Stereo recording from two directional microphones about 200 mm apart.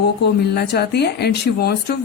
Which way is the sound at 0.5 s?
55° left (ahead or behind).